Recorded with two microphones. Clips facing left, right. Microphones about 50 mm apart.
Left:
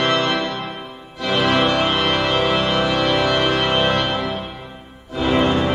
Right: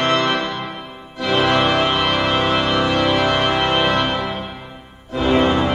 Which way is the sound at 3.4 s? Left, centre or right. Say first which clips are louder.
Right 1 dB; centre.